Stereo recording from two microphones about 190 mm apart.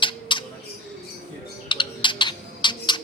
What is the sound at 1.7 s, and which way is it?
Typing, 25° left (ahead or behind).